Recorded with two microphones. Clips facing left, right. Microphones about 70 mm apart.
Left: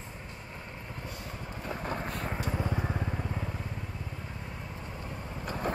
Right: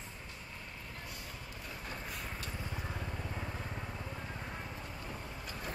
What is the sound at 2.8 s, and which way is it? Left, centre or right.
Vehicle, left.